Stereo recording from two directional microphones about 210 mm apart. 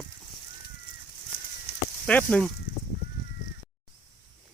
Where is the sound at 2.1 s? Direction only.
5° left (ahead or behind).